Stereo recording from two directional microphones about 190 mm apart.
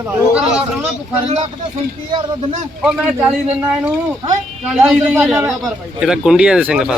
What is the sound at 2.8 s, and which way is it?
Speech, 5° right (ahead or behind).